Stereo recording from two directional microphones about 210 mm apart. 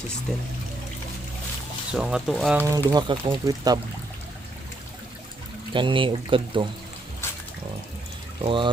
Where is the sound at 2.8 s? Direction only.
20° right (ahead or behind).